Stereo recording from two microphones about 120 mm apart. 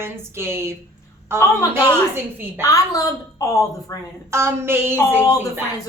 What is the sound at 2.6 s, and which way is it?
A woman's voice, 30° left (ahead or behind).